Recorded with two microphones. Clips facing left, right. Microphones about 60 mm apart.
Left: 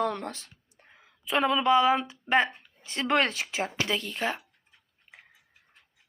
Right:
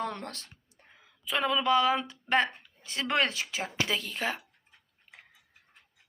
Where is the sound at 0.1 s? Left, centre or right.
Centre.